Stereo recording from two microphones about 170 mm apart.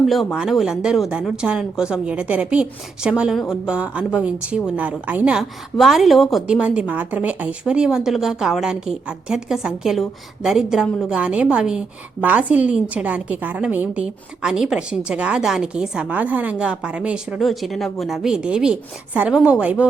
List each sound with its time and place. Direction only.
0.0 s a woman's voice: centre (ahead or behind)